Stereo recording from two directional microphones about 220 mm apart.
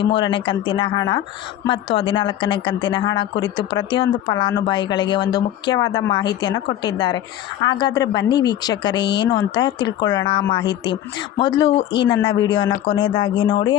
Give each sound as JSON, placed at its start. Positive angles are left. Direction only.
{"t": 0.0, "sound": "a woman's voice", "side_deg": 20}